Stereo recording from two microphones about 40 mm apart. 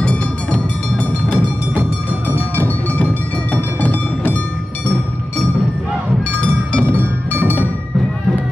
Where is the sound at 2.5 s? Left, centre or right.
Left.